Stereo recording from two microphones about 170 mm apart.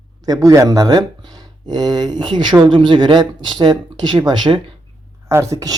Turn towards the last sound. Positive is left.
turn(degrees=-20)  # may be behind; listen again after turning